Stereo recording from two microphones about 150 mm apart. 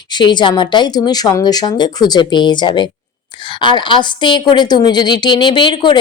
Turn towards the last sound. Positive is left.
turn(degrees=30)  # may be behind; listen again after turning